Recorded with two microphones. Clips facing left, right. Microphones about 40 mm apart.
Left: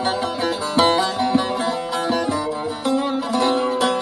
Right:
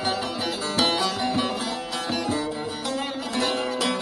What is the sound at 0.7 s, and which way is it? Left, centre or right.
Music, left.